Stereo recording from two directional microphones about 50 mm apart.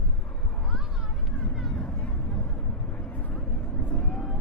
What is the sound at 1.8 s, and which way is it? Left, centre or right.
Vehicle, left.